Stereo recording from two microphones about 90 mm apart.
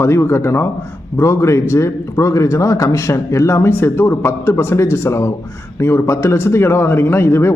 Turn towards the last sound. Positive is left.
turn(degrees=30)  # may be behind; listen again after turning